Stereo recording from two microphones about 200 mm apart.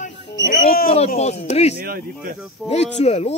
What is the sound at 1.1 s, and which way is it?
Speech, 35° left (ahead or behind).